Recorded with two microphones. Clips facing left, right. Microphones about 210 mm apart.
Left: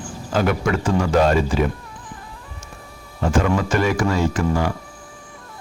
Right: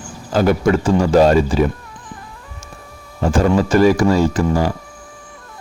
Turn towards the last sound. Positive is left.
turn(degrees=-35)  # may be behind; listen again after turning